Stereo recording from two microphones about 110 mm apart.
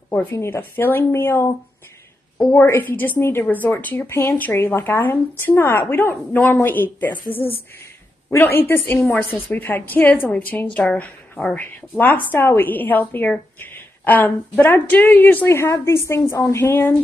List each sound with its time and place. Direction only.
0.1 s a woman's voice: 20° left (ahead or behind)
2.3 s a woman's voice: 5° left (ahead or behind)
2.6 s a woman's voice: 20° left (ahead or behind)
8.3 s a woman's voice: 25° left (ahead or behind)